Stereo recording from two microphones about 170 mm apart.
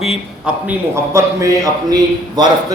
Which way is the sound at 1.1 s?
20° right (ahead or behind).